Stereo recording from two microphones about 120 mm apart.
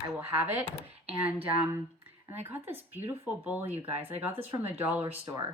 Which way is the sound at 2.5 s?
15° right (ahead or behind).